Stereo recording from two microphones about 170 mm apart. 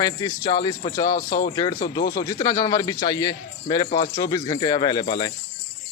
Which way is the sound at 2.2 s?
20° left (ahead or behind).